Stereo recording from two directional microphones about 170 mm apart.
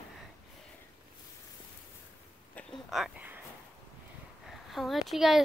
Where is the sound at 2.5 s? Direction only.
Centre (ahead or behind).